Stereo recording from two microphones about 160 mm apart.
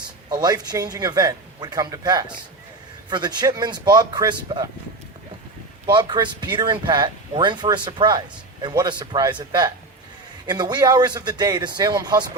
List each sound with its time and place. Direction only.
0.3 s speech: 25° right (ahead or behind)
5.8 s speech: 30° right (ahead or behind)